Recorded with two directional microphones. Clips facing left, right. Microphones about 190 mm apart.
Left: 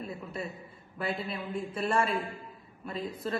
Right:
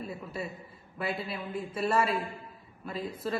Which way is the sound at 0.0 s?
5° right (ahead or behind).